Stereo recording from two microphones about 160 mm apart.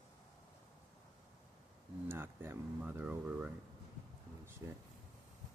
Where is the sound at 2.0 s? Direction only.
15° right (ahead or behind).